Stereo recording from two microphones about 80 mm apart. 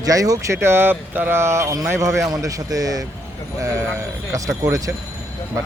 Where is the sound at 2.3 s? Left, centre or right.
Right.